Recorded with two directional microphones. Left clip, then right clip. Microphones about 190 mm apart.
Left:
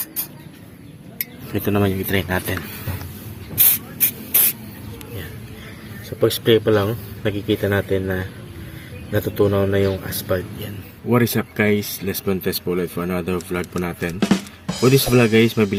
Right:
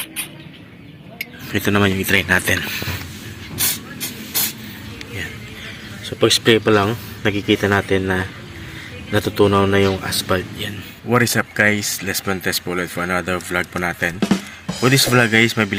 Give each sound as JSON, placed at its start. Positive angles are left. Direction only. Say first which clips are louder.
{"t": 1.5, "sound": "speech", "louder": "right 3 dB", "side_deg": 0}
{"t": 6.1, "sound": "speech", "louder": "right 2 dB", "side_deg": -10}
{"t": 11.1, "sound": "speech", "louder": "right 3 dB", "side_deg": 0}